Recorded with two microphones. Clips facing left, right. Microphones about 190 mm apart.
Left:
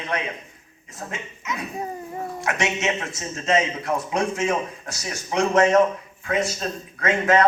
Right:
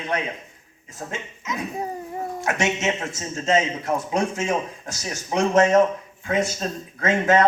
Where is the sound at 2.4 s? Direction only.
25° right (ahead or behind).